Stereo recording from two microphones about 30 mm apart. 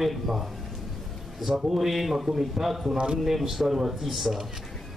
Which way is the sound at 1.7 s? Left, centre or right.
Centre.